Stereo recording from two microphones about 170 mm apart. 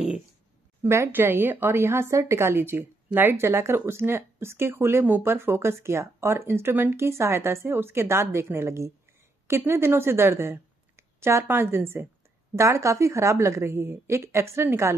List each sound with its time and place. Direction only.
0.8 s a woman's voice: 15° right (ahead or behind)